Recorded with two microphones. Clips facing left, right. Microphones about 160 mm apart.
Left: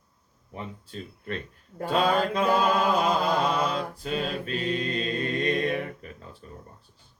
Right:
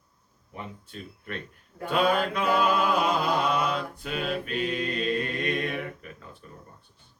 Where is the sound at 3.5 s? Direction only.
30° left (ahead or behind).